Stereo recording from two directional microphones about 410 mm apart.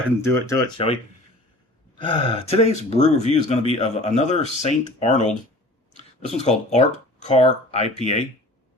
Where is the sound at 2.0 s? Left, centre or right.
Centre.